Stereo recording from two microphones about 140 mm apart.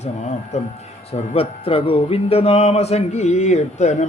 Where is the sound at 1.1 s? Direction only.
45° left (ahead or behind).